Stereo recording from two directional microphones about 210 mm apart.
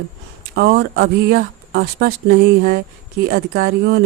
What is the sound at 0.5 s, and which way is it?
Speech, 50° right (ahead or behind).